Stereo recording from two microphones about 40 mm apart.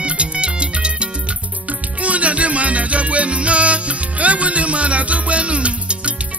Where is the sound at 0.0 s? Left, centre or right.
Right.